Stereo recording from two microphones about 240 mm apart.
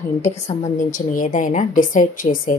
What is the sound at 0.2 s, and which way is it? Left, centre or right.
Speech, left.